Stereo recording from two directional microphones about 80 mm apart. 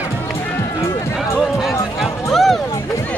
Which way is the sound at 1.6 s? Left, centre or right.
Centre.